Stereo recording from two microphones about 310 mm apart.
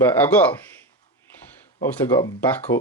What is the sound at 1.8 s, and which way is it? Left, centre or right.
Speech, centre.